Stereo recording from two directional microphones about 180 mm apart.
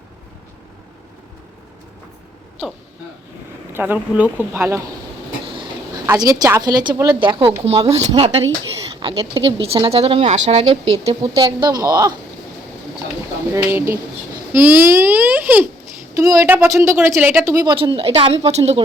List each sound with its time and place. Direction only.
3.7 s a child's voice: 10° right (ahead or behind)
6.1 s speech: 20° right (ahead or behind)
11.3 s speech: 25° right (ahead or behind)
13.5 s a child's voice: 15° right (ahead or behind); by 18.8 s 35° right (ahead or behind)